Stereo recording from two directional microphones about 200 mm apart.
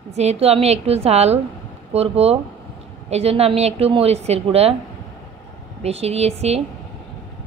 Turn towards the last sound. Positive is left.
turn(degrees=-30)  # may be behind; listen again after turning